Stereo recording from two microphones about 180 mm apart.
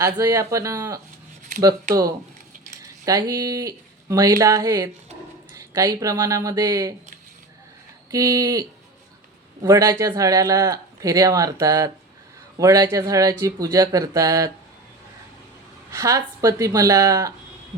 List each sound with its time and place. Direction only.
0.0 s speech: 20° right (ahead or behind)
2.8 s speech: 20° right (ahead or behind)
8.1 s speech: 20° right (ahead or behind)
9.6 s speech: 20° right (ahead or behind)
15.9 s speech: 15° right (ahead or behind)